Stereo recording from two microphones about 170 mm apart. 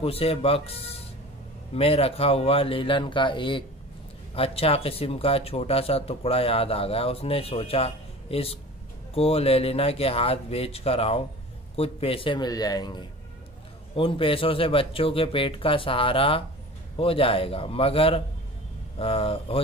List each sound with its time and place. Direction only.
0.0 s speech: 35° left (ahead or behind)